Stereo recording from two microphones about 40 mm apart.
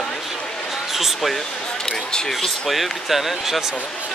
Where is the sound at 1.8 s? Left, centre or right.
Centre.